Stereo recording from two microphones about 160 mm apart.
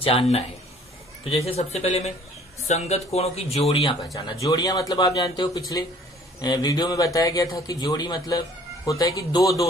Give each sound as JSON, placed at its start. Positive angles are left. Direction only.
{"t": 0.0, "sound": "speech", "side_deg": 35}
{"t": 4.1, "sound": "a man's voice", "side_deg": 20}